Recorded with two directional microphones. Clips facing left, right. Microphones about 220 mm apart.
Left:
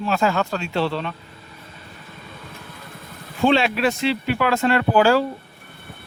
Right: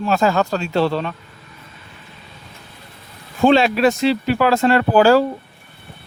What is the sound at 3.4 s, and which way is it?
Speech, 40° right (ahead or behind).